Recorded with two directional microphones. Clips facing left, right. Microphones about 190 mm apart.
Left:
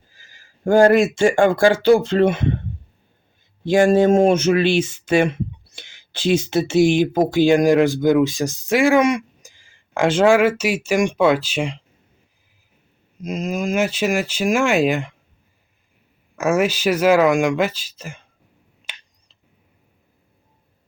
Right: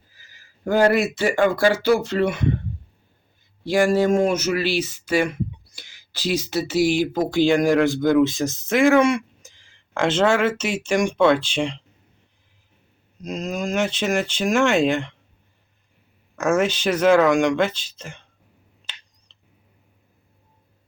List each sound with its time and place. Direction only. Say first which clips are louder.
0.1 s a sound: left 2 dB; 25° left (ahead or behind)
0.6 s speech: left 5 dB; 45° left (ahead or behind)
1.8 s speech: left 5 dB; 25° left (ahead or behind)
3.6 s speech: left 4 dB; 20° left (ahead or behind); by 11.8 s 5° left (ahead or behind)
13.2 s speech: left 3 dB; 5° left (ahead or behind)
16.3 s speech: left 2 dB; 10° left (ahead or behind)
19.3 s a sound: left 3 dB; 10° left (ahead or behind)